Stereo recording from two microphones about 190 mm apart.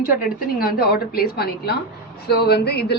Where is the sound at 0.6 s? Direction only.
55° left (ahead or behind).